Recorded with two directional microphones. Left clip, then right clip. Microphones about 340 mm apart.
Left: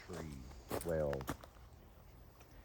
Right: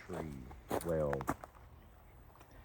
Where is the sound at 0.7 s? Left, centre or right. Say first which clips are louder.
Right 3 dB; centre.